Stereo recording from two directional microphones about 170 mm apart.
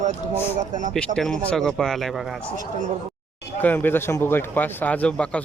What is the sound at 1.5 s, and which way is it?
Speech, centre (ahead or behind).